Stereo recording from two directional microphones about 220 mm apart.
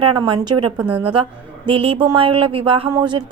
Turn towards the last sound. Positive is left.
turn(degrees=-20)  # may be behind; listen again after turning